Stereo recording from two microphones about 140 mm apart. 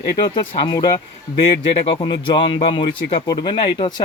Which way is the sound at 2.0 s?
35° left (ahead or behind).